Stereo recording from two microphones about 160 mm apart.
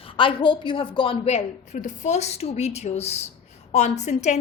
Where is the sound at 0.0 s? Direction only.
35° left (ahead or behind).